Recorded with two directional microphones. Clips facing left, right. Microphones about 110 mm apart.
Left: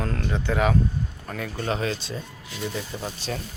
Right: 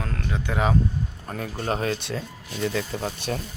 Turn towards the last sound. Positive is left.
turn(degrees=-50)  # may be behind; listen again after turning